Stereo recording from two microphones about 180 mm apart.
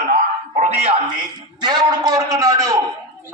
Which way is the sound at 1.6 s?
20° right (ahead or behind).